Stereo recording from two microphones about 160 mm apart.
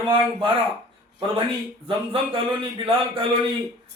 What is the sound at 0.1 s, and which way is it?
Speech, 30° right (ahead or behind).